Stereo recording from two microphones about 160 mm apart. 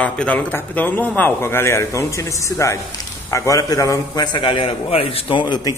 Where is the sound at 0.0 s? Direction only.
5° left (ahead or behind).